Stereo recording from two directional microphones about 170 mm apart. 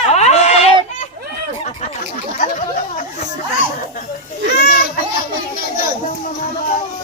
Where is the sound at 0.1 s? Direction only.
40° left (ahead or behind).